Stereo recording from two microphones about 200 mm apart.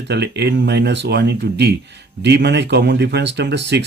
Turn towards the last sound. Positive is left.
turn(degrees=-60)  # may be behind; listen again after turning